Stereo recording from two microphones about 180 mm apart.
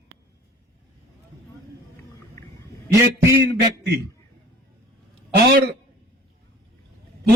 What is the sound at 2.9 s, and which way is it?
Speech, 15° right (ahead or behind).